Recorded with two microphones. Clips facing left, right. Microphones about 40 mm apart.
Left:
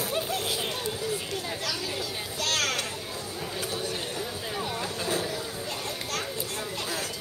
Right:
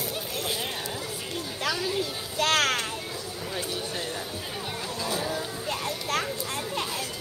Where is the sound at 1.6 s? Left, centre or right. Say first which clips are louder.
Right 4 dB; right.